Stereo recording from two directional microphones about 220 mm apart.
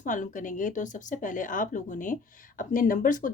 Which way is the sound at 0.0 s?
35° left (ahead or behind).